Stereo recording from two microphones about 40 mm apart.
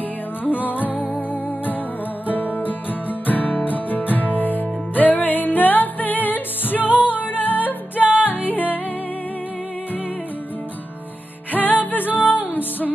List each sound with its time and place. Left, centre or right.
0.4 s music: left
2.3 s music: left
11.5 s music: left